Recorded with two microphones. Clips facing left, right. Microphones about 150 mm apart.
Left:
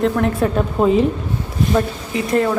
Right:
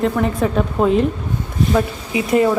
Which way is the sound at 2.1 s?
10° right (ahead or behind).